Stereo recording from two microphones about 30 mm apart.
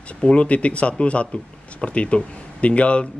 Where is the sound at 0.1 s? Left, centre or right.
Left.